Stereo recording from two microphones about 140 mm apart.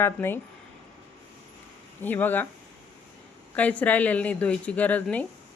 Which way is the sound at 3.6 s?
10° left (ahead or behind).